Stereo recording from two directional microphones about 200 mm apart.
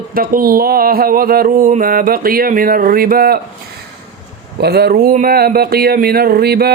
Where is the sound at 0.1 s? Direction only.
45° right (ahead or behind).